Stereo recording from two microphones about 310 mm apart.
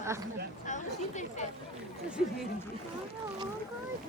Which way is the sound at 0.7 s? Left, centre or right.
Left.